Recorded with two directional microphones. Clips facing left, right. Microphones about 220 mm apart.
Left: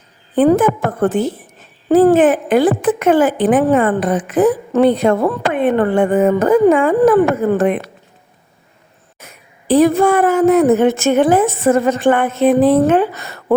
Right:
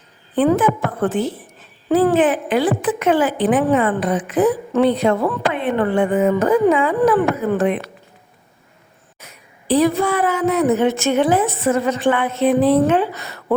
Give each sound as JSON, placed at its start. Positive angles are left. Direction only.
{"t": 0.3, "sound": "speech", "side_deg": 45}
{"t": 9.1, "sound": "speech", "side_deg": 50}